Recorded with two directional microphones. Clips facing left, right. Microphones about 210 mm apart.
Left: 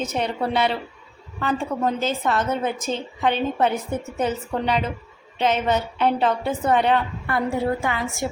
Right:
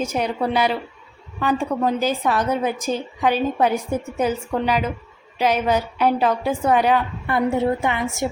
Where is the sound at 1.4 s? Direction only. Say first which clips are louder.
Right 3 dB; 15° right (ahead or behind).